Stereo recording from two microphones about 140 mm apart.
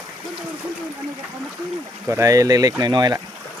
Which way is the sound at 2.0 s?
20° right (ahead or behind).